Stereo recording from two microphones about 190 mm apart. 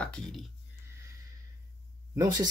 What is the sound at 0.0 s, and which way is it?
Speech, 5° left (ahead or behind).